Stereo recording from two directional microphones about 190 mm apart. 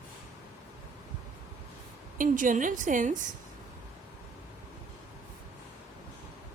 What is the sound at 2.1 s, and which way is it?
A woman's voice, 45° right (ahead or behind).